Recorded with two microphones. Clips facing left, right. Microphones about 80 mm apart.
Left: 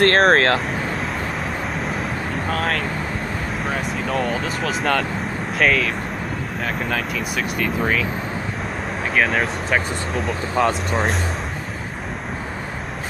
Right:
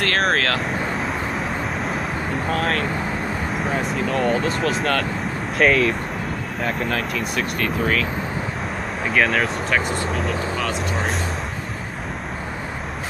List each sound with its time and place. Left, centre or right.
0.0 s speech: left
3.6 s speech: centre
9.1 s speech: centre